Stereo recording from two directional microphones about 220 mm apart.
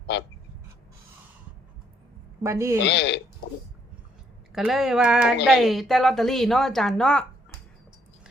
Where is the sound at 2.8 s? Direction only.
55° left (ahead or behind).